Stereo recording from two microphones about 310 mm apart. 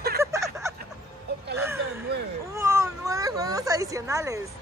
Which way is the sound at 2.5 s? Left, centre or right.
Centre.